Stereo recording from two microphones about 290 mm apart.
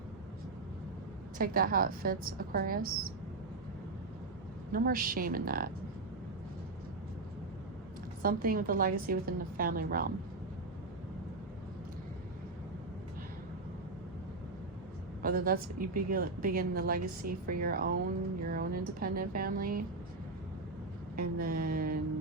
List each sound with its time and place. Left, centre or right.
1.4 s a woman's voice: right
4.7 s a woman's voice: right
8.2 s a woman's voice: right
15.2 s a woman's voice: right
21.2 s a sound: right